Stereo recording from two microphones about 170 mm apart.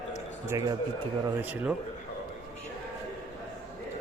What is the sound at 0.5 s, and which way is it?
Speech, 20° right (ahead or behind).